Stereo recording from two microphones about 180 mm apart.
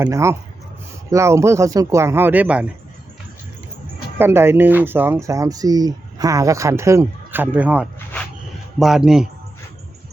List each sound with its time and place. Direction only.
0.0 s speech: 15° right (ahead or behind)
4.2 s a man's voice: 15° right (ahead or behind)